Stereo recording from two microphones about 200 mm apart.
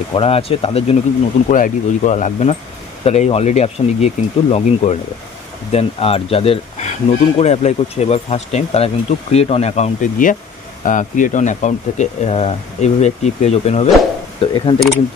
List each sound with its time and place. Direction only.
0.1 s speech: 30° left (ahead or behind)